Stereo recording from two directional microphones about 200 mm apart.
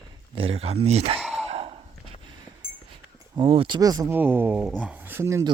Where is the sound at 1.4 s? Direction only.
30° right (ahead or behind).